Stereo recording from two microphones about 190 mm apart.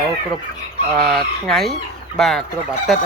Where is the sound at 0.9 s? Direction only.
5° left (ahead or behind).